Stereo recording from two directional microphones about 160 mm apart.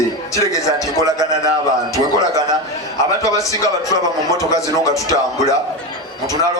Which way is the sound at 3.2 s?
20° left (ahead or behind).